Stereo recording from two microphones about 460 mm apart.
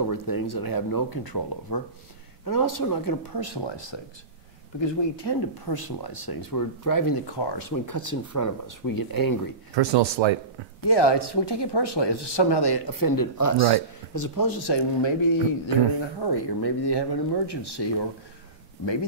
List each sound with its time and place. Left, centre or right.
0.1 s speech: left
9.8 s speech: right
10.9 s speech: left